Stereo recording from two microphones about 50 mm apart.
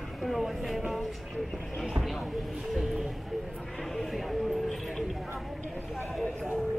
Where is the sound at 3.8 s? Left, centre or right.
Centre.